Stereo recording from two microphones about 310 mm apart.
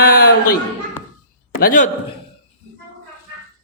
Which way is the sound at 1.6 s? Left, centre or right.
Left.